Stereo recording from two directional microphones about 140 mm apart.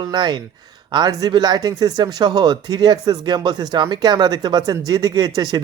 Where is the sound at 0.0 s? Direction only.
30° right (ahead or behind).